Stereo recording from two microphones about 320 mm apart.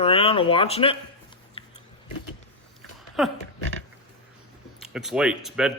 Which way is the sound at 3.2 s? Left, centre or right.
Centre.